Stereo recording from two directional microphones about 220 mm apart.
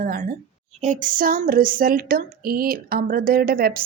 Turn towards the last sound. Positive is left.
turn(degrees=-40)  # may be behind; listen again after turning